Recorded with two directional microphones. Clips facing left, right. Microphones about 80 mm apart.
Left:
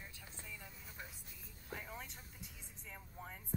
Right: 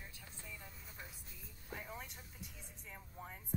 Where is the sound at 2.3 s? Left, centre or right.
Left.